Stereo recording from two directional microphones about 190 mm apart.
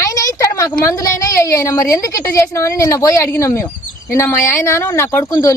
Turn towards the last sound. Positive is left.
turn(degrees=15)  # may be behind; listen again after turning